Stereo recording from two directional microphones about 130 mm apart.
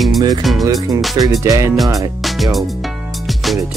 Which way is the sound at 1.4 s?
25° right (ahead or behind).